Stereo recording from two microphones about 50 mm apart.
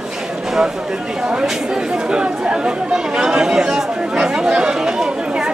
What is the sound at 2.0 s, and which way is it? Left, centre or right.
Chatter, right.